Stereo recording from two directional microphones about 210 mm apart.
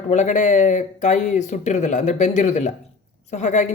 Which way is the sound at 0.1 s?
35° left (ahead or behind).